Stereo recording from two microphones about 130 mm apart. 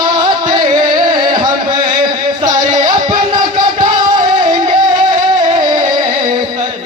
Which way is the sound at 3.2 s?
35° right (ahead or behind).